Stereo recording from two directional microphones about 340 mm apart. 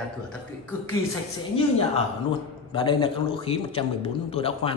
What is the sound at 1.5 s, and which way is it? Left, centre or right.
A woman's voice, centre.